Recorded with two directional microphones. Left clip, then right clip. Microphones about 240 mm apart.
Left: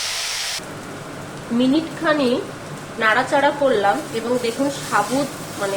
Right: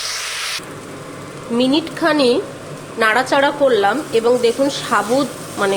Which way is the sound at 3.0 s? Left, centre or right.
Right.